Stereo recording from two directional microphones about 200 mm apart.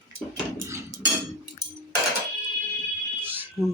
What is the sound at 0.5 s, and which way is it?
Dishes, 15° right (ahead or behind).